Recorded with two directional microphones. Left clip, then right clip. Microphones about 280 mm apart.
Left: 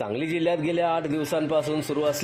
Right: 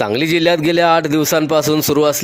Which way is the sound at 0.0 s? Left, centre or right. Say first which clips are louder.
Right 11 dB; right.